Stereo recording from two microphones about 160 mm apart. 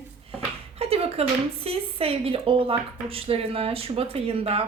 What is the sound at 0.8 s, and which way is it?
Speech, 40° right (ahead or behind).